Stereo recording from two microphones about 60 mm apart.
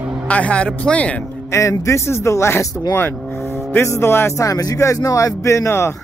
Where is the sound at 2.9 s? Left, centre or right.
Left.